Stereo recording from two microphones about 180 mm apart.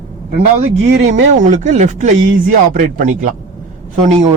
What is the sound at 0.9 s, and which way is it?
Speech, 75° right (ahead or behind).